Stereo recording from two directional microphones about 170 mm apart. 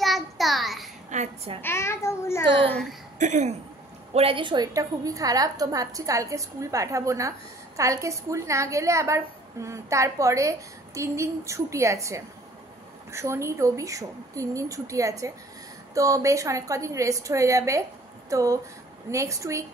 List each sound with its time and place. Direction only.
0.0 s a sound: centre (ahead or behind)
1.1 s a child's voice: 40° right (ahead or behind)
1.6 s a child's voice: 15° left (ahead or behind)
2.4 s a woman's voice: 30° right (ahead or behind)
2.7 s a woman's voice: centre (ahead or behind)
3.2 s a sound: 45° right (ahead or behind)
4.1 s a woman's voice: 35° right (ahead or behind); by 19.6 s 20° right (ahead or behind)